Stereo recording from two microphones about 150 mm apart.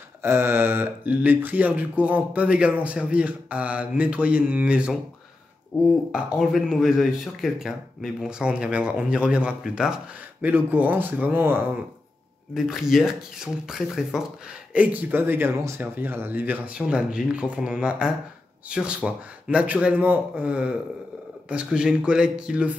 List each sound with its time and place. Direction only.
0.2 s speech: 15° right (ahead or behind)
6.1 s speech: 5° right (ahead or behind)
12.5 s speech: 5° right (ahead or behind)